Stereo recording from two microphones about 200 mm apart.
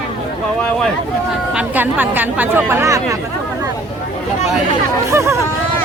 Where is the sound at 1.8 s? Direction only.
10° right (ahead or behind).